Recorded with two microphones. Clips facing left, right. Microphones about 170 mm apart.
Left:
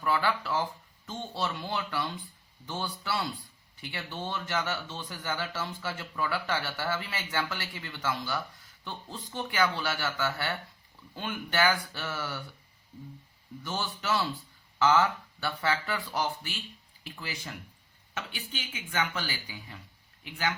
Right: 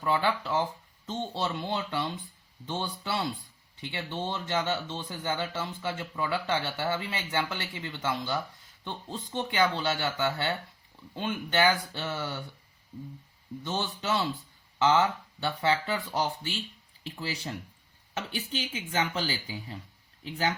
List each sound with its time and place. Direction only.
0.0 s speech: 20° right (ahead or behind)
13.7 s speech: 25° right (ahead or behind)